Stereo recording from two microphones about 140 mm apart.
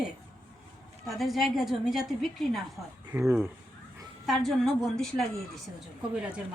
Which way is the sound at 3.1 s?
15° right (ahead or behind).